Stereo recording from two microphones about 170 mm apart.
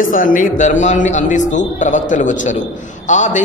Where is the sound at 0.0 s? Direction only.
50° left (ahead or behind).